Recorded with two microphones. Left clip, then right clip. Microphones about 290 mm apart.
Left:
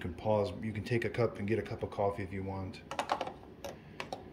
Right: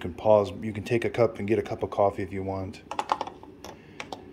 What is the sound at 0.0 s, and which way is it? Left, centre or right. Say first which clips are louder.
Speech: right 11 dB; centre.